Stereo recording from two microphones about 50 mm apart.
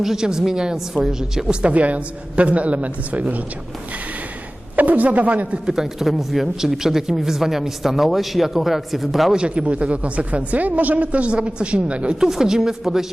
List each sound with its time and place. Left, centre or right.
0.0 s a woman's voice: centre
1.6 s a woman's voice: right
4.8 s speech: right
5.6 s speech: centre
9.3 s a woman's voice: right
12.2 s a woman's voice: centre